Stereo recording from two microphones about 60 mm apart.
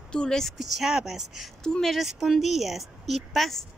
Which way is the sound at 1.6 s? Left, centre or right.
Centre.